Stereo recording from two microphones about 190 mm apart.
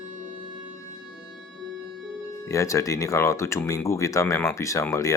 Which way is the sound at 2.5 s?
15° left (ahead or behind).